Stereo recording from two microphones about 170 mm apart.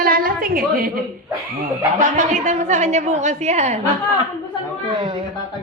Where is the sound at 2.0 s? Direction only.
45° right (ahead or behind).